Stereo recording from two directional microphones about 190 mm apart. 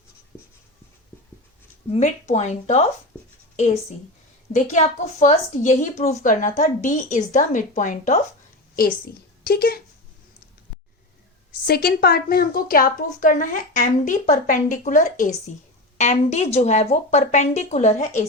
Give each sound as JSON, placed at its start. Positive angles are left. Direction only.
{"t": 0.3, "sound": "writing", "side_deg": 15}
{"t": 1.9, "sound": "a woman's voice", "side_deg": 35}
{"t": 11.6, "sound": "a woman's voice", "side_deg": 55}